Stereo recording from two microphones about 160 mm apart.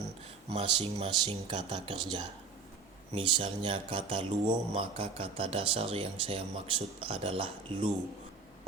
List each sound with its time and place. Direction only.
0.5 s speech: 40° right (ahead or behind)